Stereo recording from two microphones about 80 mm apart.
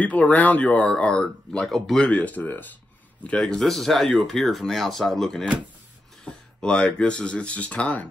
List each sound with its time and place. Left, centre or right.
0.0 s speech: centre
2.0 s speech: centre
3.3 s speech: centre